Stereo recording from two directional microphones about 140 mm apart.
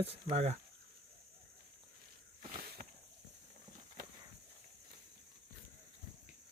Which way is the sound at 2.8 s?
90° right.